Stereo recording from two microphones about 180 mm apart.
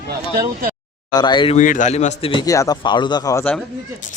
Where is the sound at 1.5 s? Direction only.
45° left (ahead or behind).